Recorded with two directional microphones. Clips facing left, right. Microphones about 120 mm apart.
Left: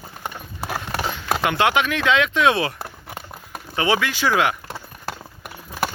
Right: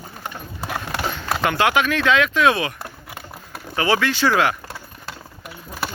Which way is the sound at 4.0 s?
10° left (ahead or behind).